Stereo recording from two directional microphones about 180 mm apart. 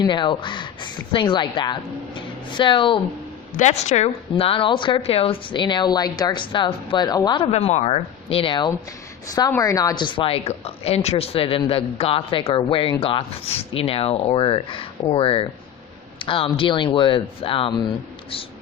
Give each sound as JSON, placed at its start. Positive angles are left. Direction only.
{"t": 0.0, "sound": "a woman's voice", "side_deg": 25}
{"t": 3.6, "sound": "a woman's voice", "side_deg": 40}
{"t": 7.5, "sound": "a woman's voice", "side_deg": 35}